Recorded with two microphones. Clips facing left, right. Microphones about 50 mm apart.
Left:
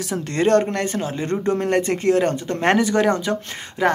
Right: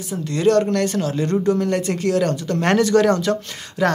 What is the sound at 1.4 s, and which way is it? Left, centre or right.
Speech, left.